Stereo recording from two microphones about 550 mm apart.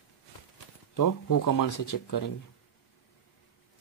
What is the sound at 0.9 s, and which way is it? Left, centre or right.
Speech, left.